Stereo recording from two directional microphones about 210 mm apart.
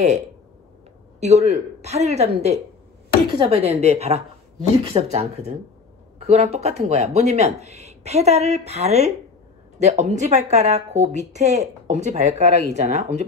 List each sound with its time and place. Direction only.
1.2 s speech: 30° right (ahead or behind)